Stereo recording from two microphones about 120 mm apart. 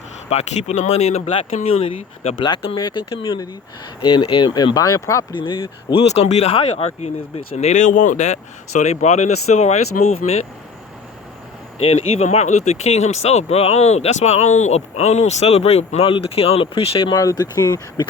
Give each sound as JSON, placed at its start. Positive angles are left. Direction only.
{"t": 0.3, "sound": "speech", "side_deg": 65}
{"t": 4.0, "sound": "speech", "side_deg": 45}
{"t": 5.3, "sound": "speech", "side_deg": 45}
{"t": 11.8, "sound": "speech", "side_deg": 55}
{"t": 17.1, "sound": "speech", "side_deg": 30}